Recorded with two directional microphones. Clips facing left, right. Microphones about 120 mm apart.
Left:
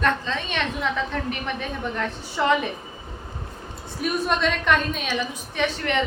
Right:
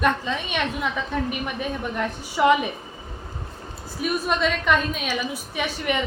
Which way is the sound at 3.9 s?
Centre (ahead or behind).